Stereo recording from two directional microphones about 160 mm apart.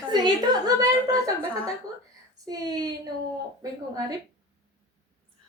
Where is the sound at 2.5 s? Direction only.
25° right (ahead or behind).